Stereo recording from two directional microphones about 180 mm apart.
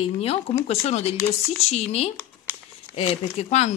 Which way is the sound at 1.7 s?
35° left (ahead or behind).